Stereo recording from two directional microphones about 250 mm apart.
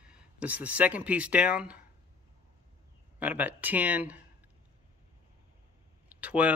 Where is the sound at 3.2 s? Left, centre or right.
Centre.